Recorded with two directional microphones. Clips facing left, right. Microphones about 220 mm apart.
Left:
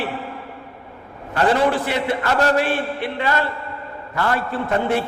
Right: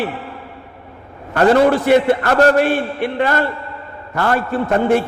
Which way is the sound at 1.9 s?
50° right (ahead or behind).